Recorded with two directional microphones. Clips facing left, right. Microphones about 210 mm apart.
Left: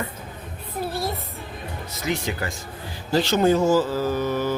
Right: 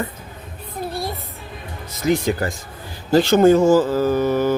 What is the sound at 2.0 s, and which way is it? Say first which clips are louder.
Speech: right 8 dB; 45° right (ahead or behind).